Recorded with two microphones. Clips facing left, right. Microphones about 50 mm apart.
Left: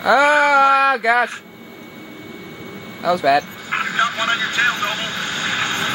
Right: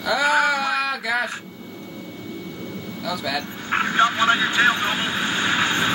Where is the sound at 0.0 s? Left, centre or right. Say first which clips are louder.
Left 6 dB; left.